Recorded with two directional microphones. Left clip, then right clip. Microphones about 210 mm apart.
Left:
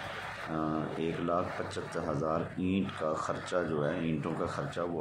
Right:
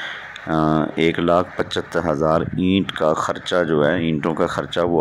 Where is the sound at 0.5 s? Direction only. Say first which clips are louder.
Right 16 dB; 40° right (ahead or behind).